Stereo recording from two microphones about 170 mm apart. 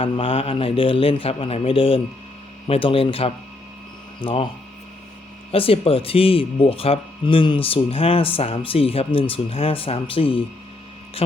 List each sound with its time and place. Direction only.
0.0 s speech: 35° left (ahead or behind)
5.5 s speech: 35° left (ahead or behind)